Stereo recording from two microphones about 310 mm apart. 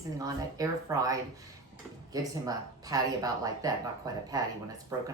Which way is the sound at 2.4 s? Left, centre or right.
Centre.